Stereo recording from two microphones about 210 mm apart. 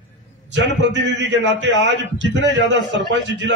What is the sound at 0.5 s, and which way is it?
A man's voice, 60° right (ahead or behind).